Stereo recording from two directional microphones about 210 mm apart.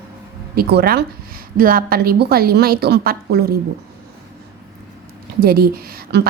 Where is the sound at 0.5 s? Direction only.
45° right (ahead or behind).